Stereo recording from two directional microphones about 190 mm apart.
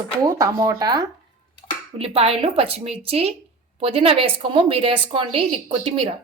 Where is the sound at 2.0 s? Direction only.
30° right (ahead or behind).